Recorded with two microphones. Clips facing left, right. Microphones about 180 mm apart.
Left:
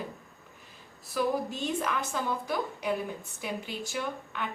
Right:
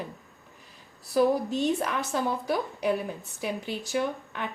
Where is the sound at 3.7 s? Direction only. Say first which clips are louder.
Right 6 dB; 35° right (ahead or behind).